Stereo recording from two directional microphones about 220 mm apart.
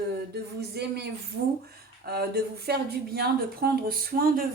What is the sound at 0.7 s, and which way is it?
Speech, 50° right (ahead or behind).